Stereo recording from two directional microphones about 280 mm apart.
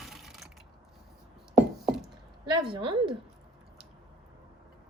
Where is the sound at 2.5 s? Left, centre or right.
Centre.